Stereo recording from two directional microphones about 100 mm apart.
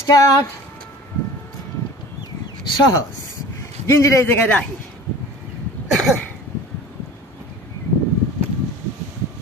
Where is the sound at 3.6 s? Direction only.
30° left (ahead or behind).